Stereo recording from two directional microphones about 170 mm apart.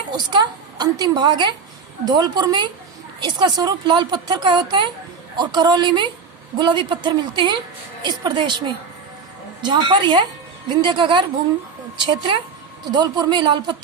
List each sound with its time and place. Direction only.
0.3 s a woman's voice: 25° right (ahead or behind)